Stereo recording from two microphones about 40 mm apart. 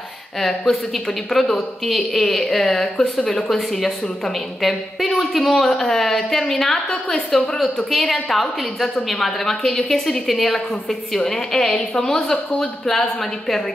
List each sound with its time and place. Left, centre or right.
0.4 s a woman's voice: centre